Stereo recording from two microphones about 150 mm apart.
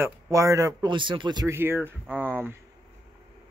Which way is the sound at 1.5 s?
15° right (ahead or behind).